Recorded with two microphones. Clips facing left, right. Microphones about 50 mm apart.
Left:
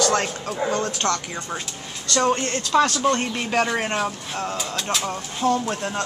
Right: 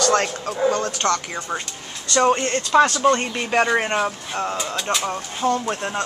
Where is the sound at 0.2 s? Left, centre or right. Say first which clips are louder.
Right 4 dB; centre.